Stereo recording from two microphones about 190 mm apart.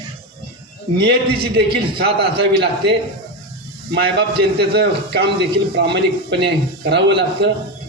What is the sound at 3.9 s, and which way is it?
A man's voice, 60° right (ahead or behind).